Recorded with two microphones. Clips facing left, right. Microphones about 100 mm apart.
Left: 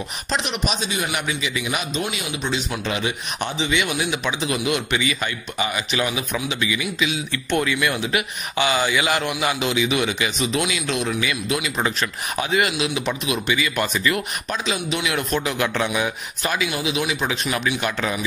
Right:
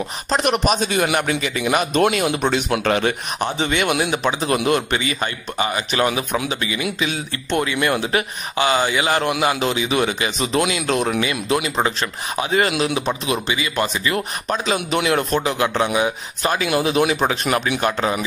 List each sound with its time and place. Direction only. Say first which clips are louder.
0.3 s a man's voice: right 7 dB; 50° right (ahead or behind); by 16.6 s 30° right (ahead or behind)
16.6 s a man's voice: right 10 dB; 50° right (ahead or behind)